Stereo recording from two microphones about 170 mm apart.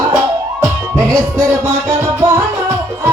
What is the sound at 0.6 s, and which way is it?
Music, 15° right (ahead or behind).